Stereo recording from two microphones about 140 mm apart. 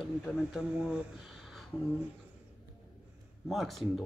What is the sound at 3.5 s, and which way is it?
Speech, centre (ahead or behind).